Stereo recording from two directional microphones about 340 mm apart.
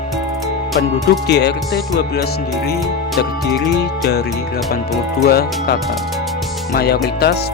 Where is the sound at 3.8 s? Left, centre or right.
Left.